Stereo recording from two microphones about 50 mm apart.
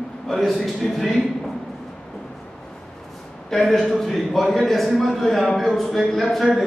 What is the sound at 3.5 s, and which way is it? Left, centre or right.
A man's voice, centre.